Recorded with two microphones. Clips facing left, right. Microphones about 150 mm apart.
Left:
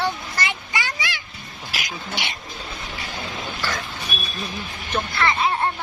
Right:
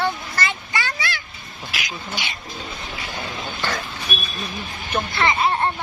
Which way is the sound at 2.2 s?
70° left (ahead or behind).